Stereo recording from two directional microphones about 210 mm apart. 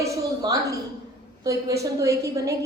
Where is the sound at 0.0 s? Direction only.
15° right (ahead or behind).